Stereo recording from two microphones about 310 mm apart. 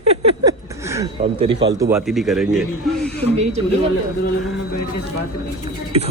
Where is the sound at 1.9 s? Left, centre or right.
Centre.